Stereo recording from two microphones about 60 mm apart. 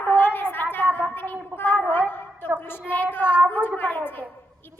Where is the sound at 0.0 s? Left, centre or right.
Left.